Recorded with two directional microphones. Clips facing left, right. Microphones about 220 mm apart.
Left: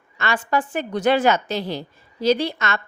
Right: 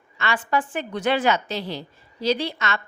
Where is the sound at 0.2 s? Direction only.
45° left (ahead or behind).